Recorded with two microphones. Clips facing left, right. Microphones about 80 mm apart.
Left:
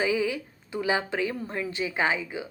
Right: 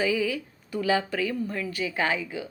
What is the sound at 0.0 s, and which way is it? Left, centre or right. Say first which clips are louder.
A woman's voice: even; left.